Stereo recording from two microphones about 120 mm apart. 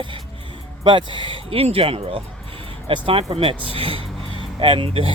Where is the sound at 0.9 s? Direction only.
40° right (ahead or behind).